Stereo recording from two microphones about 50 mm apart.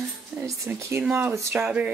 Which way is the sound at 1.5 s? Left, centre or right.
Right.